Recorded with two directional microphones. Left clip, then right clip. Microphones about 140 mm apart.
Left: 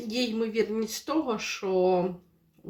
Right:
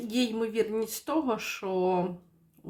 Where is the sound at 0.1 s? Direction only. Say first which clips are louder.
Left 1 dB; 30° right (ahead or behind).